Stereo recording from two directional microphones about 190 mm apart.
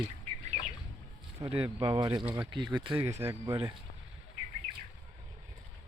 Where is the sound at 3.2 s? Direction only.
15° right (ahead or behind).